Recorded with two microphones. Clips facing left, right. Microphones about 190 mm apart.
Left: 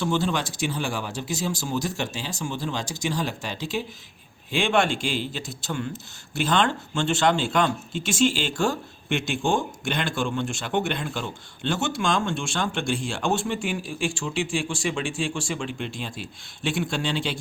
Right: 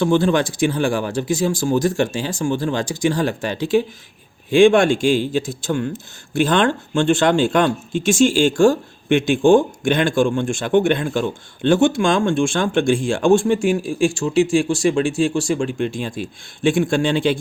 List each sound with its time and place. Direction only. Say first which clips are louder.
0.0 s speech: right 9 dB; 55° right (ahead or behind)